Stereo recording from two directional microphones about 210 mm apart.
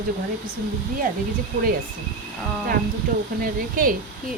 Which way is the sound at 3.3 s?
40° right (ahead or behind).